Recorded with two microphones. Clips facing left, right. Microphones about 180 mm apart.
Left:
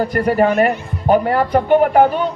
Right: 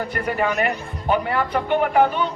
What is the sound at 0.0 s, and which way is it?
A man's voice, 35° left (ahead or behind).